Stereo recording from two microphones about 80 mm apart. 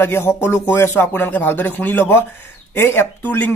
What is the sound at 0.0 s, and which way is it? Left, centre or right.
Speech, left.